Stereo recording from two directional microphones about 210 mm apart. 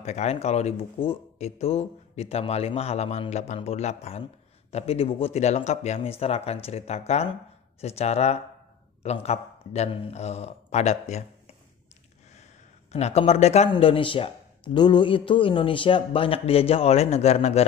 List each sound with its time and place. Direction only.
0.0 s speech: 30° left (ahead or behind)
12.9 s speech: 30° left (ahead or behind)